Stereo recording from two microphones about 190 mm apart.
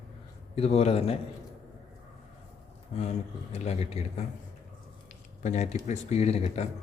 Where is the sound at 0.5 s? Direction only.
30° left (ahead or behind).